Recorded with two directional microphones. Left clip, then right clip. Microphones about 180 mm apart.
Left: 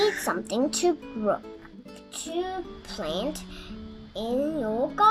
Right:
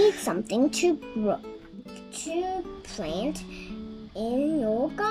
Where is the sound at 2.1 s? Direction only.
15° right (ahead or behind).